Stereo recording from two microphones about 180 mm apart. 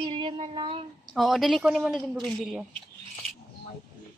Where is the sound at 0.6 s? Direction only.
30° right (ahead or behind).